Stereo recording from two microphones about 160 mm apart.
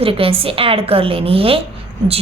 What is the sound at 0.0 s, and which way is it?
A woman's voice, 35° right (ahead or behind).